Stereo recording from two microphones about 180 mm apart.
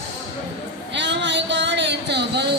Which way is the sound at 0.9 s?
75° right (ahead or behind).